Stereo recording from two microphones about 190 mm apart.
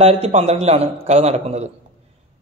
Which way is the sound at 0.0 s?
35° right (ahead or behind).